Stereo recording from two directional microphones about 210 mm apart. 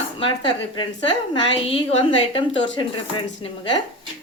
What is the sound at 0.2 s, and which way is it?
A woman's voice, 20° left (ahead or behind).